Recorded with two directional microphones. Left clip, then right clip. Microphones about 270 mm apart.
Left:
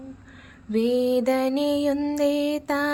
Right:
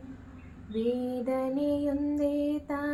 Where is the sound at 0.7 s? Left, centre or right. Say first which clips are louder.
Left 9 dB; left.